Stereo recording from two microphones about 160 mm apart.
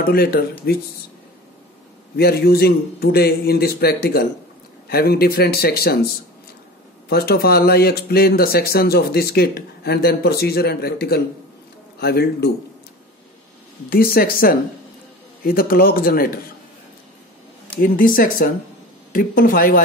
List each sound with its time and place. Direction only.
0.0 s speech: 70° left (ahead or behind)
2.1 s speech: 75° left (ahead or behind)
7.1 s speech: 75° left (ahead or behind)
13.8 s speech: 65° left (ahead or behind)
17.7 s speech: 60° left (ahead or behind)